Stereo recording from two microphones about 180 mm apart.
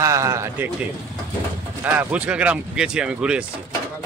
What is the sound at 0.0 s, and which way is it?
Speech, 15° right (ahead or behind).